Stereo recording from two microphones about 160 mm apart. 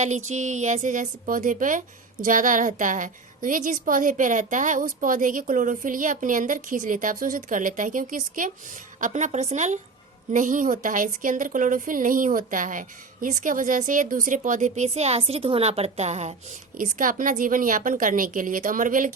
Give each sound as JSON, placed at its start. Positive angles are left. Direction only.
{"t": 0.0, "sound": "a woman's voice", "side_deg": -45}
{"t": 16.7, "sound": "a woman's voice", "side_deg": -55}